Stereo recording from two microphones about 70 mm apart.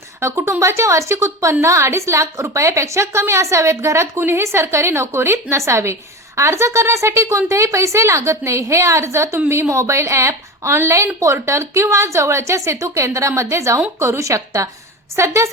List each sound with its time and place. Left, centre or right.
0.2 s a woman's voice: right